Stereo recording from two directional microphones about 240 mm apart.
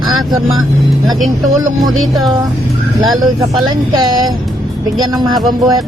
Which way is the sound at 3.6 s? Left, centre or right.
Centre.